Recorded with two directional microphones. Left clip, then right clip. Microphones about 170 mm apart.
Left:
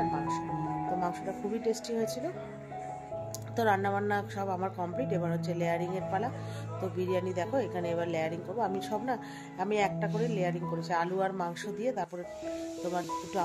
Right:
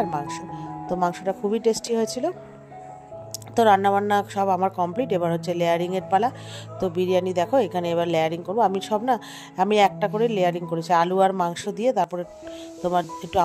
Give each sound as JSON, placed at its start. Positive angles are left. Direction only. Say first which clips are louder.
{"t": 1.0, "sound": "speech", "louder": "right 10 dB", "side_deg": -55}
{"t": 3.5, "sound": "speech", "louder": "right 11 dB", "side_deg": -50}